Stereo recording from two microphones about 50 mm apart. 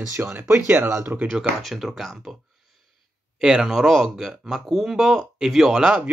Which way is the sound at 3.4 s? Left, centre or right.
Centre.